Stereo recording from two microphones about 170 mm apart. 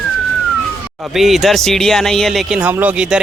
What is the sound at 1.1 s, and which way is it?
Speech, centre (ahead or behind).